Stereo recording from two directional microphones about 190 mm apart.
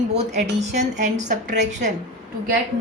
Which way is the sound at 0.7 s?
40° right (ahead or behind).